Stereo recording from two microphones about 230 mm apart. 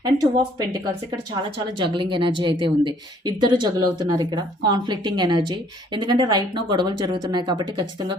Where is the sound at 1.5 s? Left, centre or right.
Right.